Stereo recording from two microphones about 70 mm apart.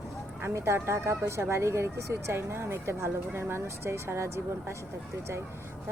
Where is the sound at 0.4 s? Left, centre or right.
Right.